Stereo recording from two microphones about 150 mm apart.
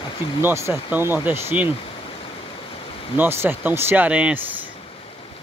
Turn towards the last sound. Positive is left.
turn(degrees=-10)  # may be behind; listen again after turning